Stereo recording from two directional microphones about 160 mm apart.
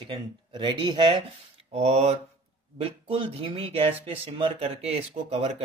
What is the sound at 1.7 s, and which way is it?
Speech, 45° right (ahead or behind).